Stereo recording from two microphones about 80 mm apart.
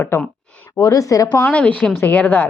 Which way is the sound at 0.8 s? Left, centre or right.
Left.